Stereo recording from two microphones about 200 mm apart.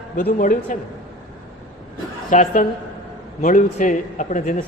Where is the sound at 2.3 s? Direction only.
40° left (ahead or behind).